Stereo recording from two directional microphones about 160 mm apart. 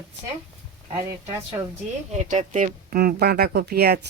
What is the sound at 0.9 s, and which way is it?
Speech, 20° right (ahead or behind).